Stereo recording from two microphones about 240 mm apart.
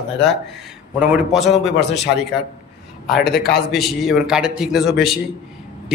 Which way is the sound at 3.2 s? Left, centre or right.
Left.